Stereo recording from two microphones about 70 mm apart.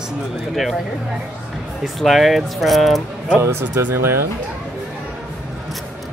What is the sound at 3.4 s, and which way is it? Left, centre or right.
Speech, right.